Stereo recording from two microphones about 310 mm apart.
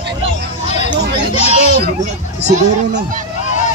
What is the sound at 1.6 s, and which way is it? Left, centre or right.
A child's voice, right.